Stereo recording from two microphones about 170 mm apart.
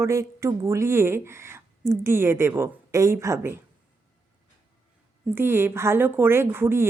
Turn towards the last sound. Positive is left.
turn(degrees=-15)  # may be behind; listen again after turning